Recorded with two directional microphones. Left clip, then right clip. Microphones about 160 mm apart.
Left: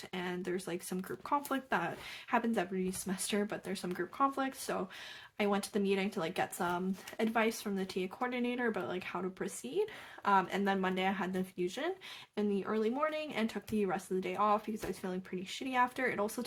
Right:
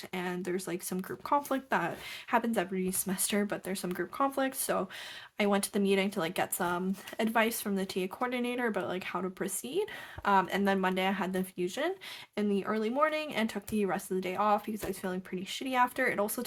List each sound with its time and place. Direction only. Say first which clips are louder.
0.1 s speech: right 3 dB; 35° right (ahead or behind)